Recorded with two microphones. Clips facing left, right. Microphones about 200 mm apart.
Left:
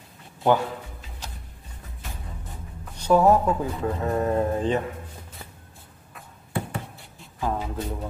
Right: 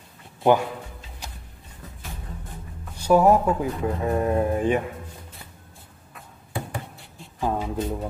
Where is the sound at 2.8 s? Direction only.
10° right (ahead or behind).